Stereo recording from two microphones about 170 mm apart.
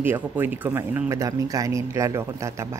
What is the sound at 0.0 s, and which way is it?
Speech, 10° right (ahead or behind).